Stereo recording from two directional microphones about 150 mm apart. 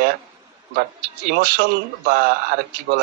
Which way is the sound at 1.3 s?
90° right.